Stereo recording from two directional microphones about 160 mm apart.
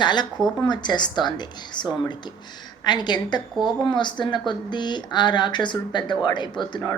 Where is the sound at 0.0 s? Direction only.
30° left (ahead or behind).